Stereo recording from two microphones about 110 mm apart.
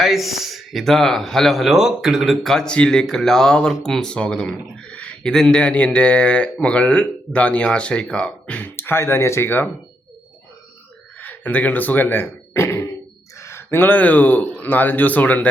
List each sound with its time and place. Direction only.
0.0 s speech: centre (ahead or behind); by 9.6 s 20° left (ahead or behind)
11.2 s speech: 15° left (ahead or behind)